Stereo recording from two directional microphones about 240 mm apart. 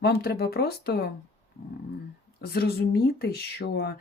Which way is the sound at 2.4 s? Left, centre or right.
Left.